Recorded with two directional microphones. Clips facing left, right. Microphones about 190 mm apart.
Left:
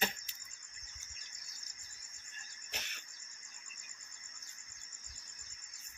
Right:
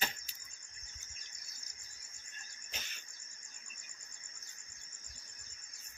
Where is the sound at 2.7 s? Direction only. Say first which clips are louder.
Left 2 dB; 65° left (ahead or behind).